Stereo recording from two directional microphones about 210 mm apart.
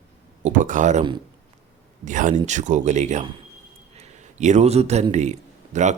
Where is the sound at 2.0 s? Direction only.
40° right (ahead or behind).